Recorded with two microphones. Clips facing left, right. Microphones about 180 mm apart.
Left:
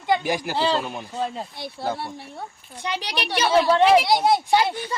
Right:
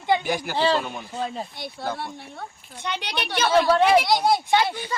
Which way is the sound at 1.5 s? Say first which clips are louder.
Left 2 dB; 30° left (ahead or behind).